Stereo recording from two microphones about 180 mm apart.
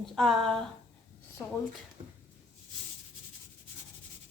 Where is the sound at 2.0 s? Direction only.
25° right (ahead or behind).